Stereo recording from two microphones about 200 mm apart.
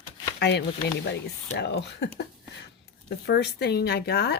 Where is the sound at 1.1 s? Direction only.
60° left (ahead or behind).